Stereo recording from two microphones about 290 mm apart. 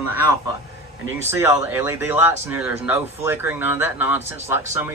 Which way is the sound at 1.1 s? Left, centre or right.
Centre.